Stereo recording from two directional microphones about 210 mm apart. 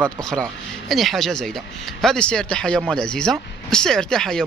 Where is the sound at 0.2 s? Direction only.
Centre (ahead or behind).